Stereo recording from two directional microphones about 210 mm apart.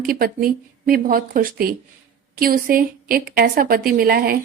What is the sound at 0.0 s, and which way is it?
A woman's voice, 45° right (ahead or behind).